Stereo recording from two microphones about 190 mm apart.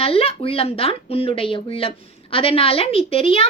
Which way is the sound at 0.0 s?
30° left (ahead or behind).